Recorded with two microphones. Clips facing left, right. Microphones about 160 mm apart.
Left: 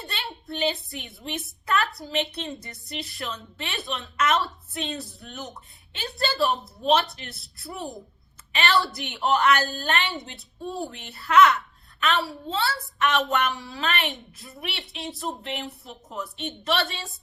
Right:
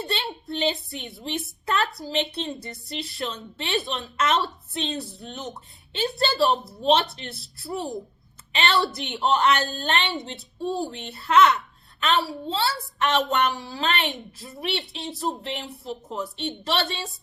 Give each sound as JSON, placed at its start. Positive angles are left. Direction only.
{"t": 0.0, "sound": "a woman's voice", "side_deg": -25}
{"t": 1.6, "sound": "a sound", "side_deg": -30}
{"t": 2.0, "sound": "a woman's voice", "side_deg": -30}
{"t": 8.5, "sound": "a woman's voice", "side_deg": -25}